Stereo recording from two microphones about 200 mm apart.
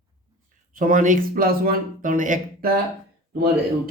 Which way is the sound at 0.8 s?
40° right (ahead or behind).